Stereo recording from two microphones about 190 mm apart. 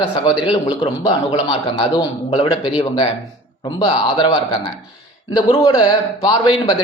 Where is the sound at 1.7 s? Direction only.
20° left (ahead or behind).